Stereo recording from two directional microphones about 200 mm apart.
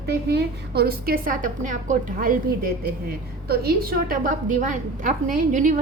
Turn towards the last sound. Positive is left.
turn(degrees=-40)  # may be behind; listen again after turning